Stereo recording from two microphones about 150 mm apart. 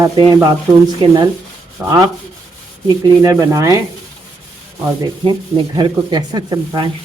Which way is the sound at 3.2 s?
20° right (ahead or behind).